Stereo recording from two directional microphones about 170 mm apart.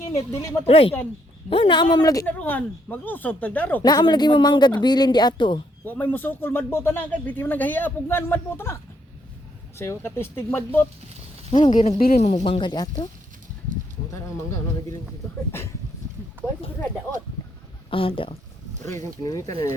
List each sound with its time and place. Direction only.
0.6 s speech: 35° left (ahead or behind)
2.2 s speech: 10° left (ahead or behind)
3.8 s speech: 25° left (ahead or behind)
5.8 s speech: 10° left (ahead or behind)
11.5 s speech: 30° left (ahead or behind)
11.8 s speech: 55° left (ahead or behind)
12.2 s speech: 40° left (ahead or behind); by 13.1 s 25° left (ahead or behind)
17.9 s speech: 30° left (ahead or behind)
19.2 s speech: 20° left (ahead or behind)